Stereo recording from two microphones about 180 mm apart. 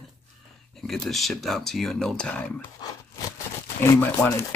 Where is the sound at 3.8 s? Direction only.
15° left (ahead or behind).